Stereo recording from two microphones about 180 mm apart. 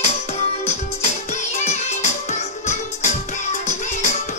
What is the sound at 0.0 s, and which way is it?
Music, 40° left (ahead or behind).